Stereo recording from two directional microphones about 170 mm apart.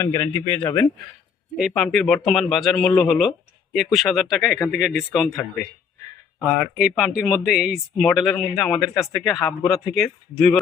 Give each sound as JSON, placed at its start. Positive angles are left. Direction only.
{"t": 0.0, "sound": "speech", "side_deg": 20}
{"t": 1.5, "sound": "speech", "side_deg": 0}
{"t": 6.6, "sound": "speech", "side_deg": -5}